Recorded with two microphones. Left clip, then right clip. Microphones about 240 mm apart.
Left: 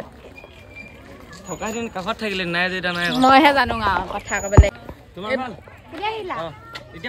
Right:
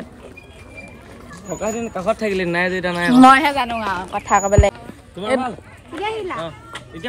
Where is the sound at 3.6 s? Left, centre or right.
Centre.